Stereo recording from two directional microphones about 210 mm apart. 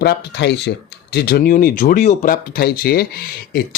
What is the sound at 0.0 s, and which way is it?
Speech, 55° left (ahead or behind).